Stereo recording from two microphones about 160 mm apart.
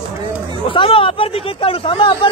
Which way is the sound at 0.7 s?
35° left (ahead or behind).